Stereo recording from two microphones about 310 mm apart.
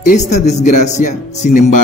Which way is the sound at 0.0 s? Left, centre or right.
Left.